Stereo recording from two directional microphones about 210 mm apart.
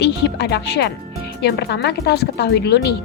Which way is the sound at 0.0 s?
55° left (ahead or behind).